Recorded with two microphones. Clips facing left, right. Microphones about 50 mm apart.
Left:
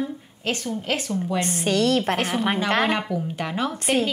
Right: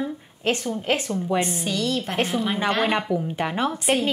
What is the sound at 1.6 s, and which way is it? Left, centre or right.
Speech, left.